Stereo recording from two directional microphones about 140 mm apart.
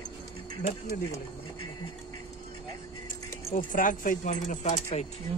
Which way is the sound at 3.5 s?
70° left (ahead or behind).